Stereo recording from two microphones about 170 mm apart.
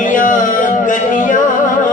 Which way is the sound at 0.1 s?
50° left (ahead or behind).